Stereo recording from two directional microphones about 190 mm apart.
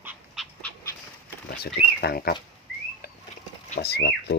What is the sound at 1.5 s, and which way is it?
Speech, 55° left (ahead or behind).